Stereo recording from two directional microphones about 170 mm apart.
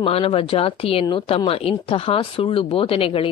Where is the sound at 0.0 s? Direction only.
35° left (ahead or behind).